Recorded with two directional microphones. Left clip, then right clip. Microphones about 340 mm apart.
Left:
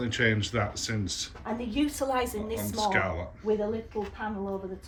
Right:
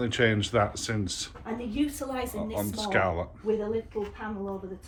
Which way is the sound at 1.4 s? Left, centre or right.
Centre.